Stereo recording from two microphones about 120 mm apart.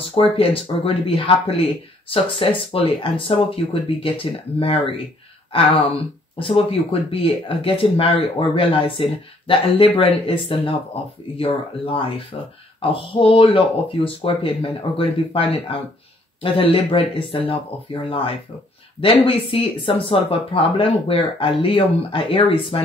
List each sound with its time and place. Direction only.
0.1 s speech: 50° left (ahead or behind)